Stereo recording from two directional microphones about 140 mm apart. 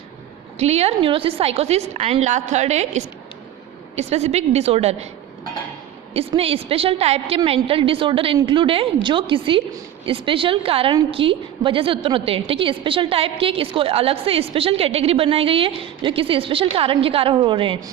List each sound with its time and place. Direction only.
0.6 s a woman's voice: 50° right (ahead or behind)
6.1 s a woman's voice: 45° right (ahead or behind)